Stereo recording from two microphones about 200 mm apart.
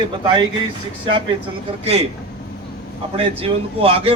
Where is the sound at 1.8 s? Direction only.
30° right (ahead or behind).